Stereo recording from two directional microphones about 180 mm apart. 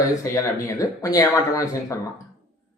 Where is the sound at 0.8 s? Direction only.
20° left (ahead or behind).